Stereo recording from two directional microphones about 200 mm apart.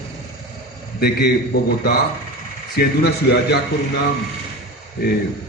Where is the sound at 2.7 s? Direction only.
55° left (ahead or behind).